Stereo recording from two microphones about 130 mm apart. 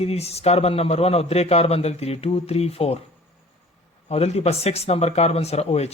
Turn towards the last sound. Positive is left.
turn(degrees=55)  # may be behind; listen again after turning